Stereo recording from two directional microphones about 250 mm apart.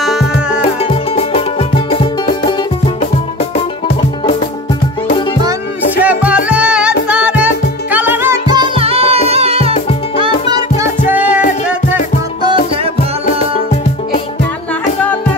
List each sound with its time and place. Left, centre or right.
0.0 s music: centre
0.8 s music: left
5.9 s music: centre; by 9.8 s right
11.1 s music: centre